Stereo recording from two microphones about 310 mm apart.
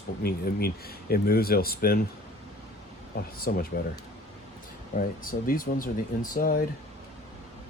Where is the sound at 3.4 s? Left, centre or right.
Left.